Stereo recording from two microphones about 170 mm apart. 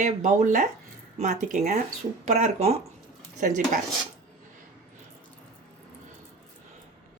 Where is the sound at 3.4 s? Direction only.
50° right (ahead or behind).